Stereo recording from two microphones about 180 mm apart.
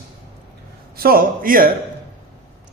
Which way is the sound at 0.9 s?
55° right (ahead or behind).